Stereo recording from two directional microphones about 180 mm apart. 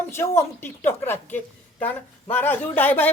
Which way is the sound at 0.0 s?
15° left (ahead or behind).